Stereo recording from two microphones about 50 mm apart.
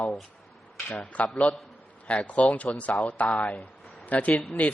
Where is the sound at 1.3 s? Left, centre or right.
Centre.